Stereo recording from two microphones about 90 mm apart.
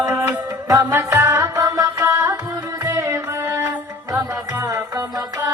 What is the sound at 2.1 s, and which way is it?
Carnatic music, 30° right (ahead or behind).